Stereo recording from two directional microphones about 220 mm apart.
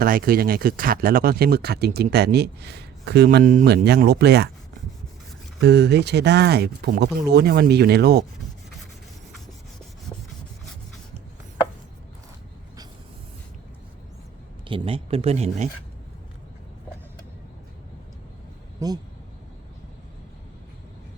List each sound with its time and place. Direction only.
0.0 s speech: 40° right (ahead or behind)
3.2 s speech: 35° right (ahead or behind)
5.5 s speech: 50° right (ahead or behind)
14.7 s speech: 25° right (ahead or behind)
18.8 s speech: 15° right (ahead or behind)